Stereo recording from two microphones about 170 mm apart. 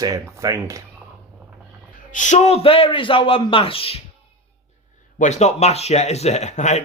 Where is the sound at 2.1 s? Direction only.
45° left (ahead or behind).